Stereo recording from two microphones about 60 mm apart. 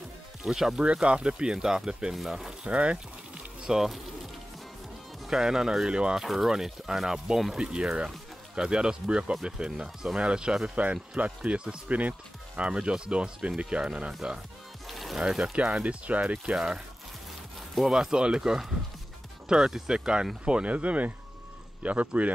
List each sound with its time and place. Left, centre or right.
0.4 s speech: centre
0.8 s speech: centre
2.7 s speech: centre
3.6 s speech: centre
5.2 s speech: centre
6.1 s speech: centre
14.9 s music: centre
15.5 s speech: centre
16.5 s speech: centre